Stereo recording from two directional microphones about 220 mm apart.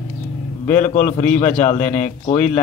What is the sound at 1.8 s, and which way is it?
Speech, 5° left (ahead or behind).